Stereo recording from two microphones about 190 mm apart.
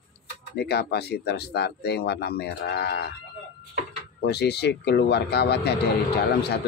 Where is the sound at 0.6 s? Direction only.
60° left (ahead or behind).